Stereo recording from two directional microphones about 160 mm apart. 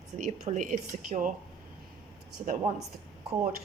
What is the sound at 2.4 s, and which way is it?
Speech, 45° right (ahead or behind).